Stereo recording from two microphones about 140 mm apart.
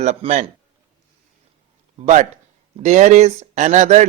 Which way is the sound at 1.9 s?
55° right (ahead or behind).